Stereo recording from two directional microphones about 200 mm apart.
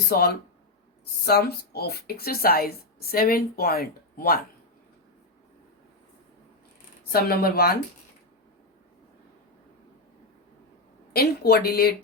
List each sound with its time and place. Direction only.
0.1 s speech: 50° left (ahead or behind)
7.1 s speech: 50° left (ahead or behind)
11.1 s speech: 50° left (ahead or behind)